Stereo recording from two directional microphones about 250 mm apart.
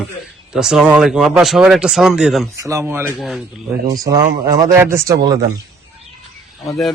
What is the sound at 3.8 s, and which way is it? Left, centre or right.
A man's voice, centre.